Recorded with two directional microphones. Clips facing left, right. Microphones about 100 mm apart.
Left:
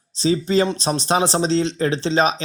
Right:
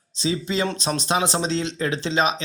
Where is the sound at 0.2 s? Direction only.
35° left (ahead or behind).